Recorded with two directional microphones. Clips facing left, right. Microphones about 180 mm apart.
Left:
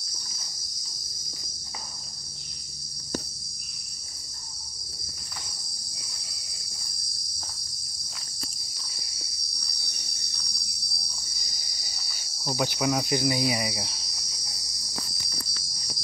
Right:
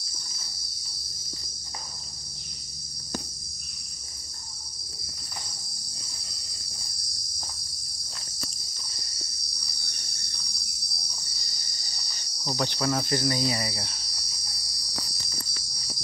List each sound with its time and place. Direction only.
9.8 s cricket: 10° left (ahead or behind)
11.8 s cricket: 5° left (ahead or behind)